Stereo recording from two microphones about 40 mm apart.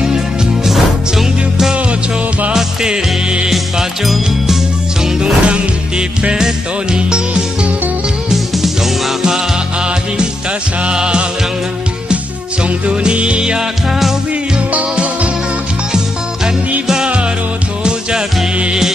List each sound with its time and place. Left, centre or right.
0.7 s music: centre
3.4 s music: centre
5.2 s music: right
6.3 s music: centre
10.8 s music: right
12.6 s music: right
16.8 s music: centre